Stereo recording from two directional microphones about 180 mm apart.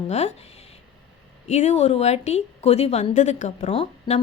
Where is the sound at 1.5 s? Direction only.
40° left (ahead or behind).